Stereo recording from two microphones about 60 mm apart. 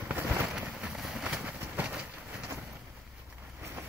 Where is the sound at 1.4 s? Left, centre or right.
Right.